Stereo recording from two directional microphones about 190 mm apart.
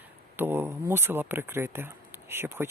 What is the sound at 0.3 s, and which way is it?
Speech, 10° right (ahead or behind).